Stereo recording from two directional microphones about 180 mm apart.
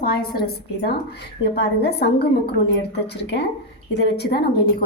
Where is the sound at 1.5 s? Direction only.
65° left (ahead or behind).